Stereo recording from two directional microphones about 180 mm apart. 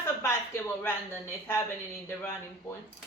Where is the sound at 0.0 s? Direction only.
15° left (ahead or behind).